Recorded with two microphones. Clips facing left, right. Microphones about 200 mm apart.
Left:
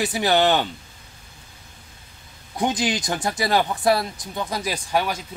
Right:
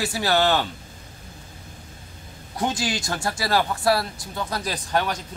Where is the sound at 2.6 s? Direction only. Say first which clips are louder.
Left 3 dB; 20° left (ahead or behind).